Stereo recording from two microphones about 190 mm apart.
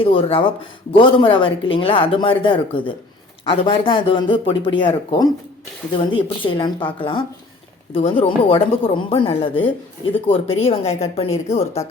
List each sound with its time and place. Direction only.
0.0 s a woman's voice: 30° left (ahead or behind)